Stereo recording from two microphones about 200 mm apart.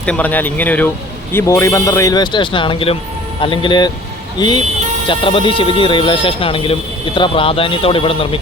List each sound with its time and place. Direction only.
0.0 s speech: 5° left (ahead or behind); by 8.4 s 25° left (ahead or behind)